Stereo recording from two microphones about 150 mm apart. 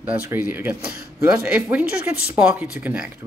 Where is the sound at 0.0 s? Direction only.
10° right (ahead or behind).